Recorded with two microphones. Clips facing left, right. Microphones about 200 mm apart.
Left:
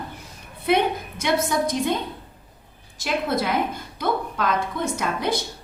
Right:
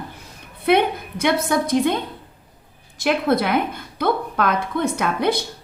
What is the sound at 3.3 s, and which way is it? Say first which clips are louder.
A woman's voice: right 4 dB; 60° right (ahead or behind).